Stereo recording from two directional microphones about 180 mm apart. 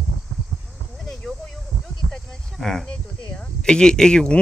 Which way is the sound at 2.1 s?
5° left (ahead or behind).